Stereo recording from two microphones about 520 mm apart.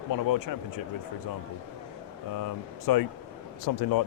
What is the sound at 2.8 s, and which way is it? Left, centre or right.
Speech, left.